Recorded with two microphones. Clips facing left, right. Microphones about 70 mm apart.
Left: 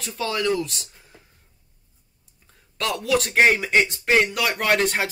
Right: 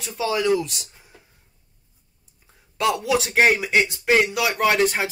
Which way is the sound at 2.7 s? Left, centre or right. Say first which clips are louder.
Right 2 dB; centre.